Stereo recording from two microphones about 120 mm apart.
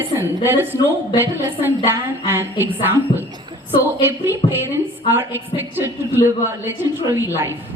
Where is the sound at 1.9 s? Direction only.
20° right (ahead or behind).